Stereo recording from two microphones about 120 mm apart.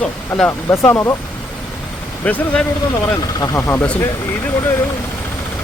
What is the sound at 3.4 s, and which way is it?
Speech, 25° left (ahead or behind).